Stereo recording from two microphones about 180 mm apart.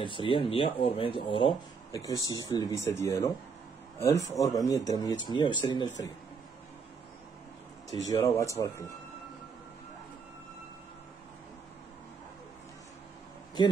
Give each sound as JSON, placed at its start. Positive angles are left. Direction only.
{"t": 0.0, "sound": "speech", "side_deg": 30}
{"t": 7.9, "sound": "speech", "side_deg": 20}